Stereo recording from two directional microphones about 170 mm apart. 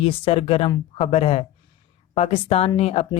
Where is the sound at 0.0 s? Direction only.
35° left (ahead or behind).